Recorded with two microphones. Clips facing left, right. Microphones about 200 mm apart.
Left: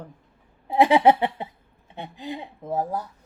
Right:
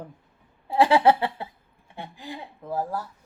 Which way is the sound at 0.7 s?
20° left (ahead or behind).